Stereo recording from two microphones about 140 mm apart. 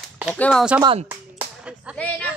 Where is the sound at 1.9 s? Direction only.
10° left (ahead or behind).